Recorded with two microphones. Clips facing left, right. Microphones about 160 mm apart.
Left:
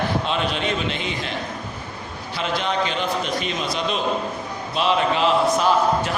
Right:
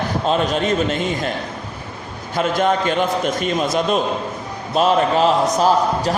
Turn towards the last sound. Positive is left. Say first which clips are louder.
# right 2 dB
turn(degrees=-40)  # may be behind; listen again after turning